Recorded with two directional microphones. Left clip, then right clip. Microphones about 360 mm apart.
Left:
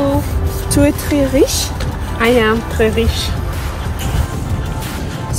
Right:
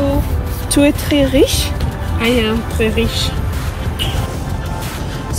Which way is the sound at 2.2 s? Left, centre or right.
Centre.